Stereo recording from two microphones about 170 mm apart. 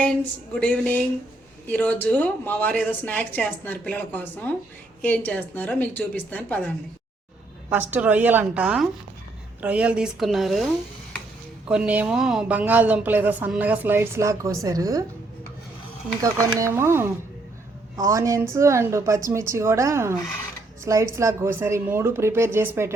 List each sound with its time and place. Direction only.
0.5 s speech: 5° left (ahead or behind)
7.7 s a woman's voice: 10° right (ahead or behind)
11.7 s a woman's voice: 5° right (ahead or behind)
16.2 s a woman's voice: 15° right (ahead or behind)